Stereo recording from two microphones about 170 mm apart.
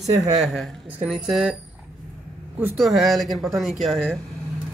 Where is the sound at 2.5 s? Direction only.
5° right (ahead or behind).